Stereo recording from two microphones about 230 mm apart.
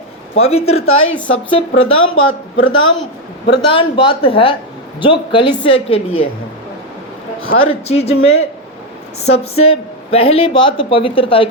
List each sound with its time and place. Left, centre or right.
0.3 s a man's voice: left
0.9 s a man's voice: left
1.5 s a man's voice: left
2.0 s a man's voice: left
3.7 s a man's voice: left
7.6 s a man's voice: left